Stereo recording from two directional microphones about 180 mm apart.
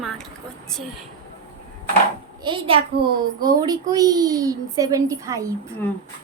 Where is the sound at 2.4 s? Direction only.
30° right (ahead or behind).